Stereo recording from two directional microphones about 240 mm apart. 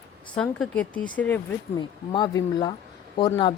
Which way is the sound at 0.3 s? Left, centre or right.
Centre.